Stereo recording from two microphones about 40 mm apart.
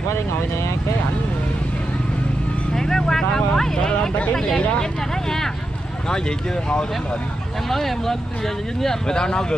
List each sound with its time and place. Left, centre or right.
2.7 s vehicle: centre
7.7 s speech: centre